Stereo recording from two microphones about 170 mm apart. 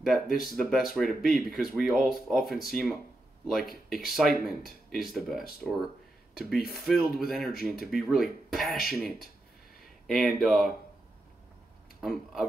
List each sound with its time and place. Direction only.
0.0 s speech: centre (ahead or behind)
12.0 s speech: centre (ahead or behind)